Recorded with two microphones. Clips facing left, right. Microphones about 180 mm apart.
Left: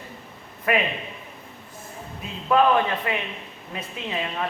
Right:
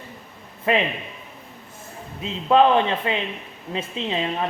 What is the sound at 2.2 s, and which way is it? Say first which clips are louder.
Speech: right 3 dB; 25° right (ahead or behind).